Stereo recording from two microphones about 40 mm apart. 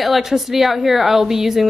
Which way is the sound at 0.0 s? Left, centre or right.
Centre.